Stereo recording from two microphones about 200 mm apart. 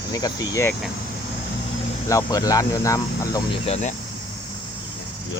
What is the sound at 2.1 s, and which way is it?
Speech, 15° left (ahead or behind).